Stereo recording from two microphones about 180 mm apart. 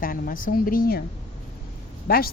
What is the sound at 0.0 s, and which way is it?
Speech, 50° left (ahead or behind).